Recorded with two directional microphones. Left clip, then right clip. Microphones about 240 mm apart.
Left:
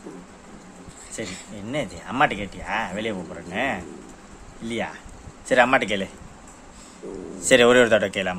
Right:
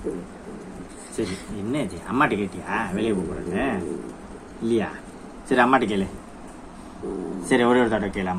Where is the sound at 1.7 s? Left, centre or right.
Left.